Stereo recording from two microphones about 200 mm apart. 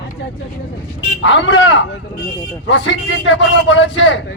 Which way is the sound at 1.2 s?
70° left (ahead or behind).